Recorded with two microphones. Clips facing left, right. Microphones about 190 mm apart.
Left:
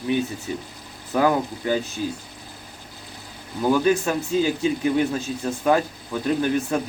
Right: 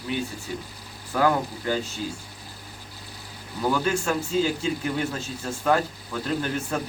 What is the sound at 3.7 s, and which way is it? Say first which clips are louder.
Speech: left 6 dB; 20° left (ahead or behind).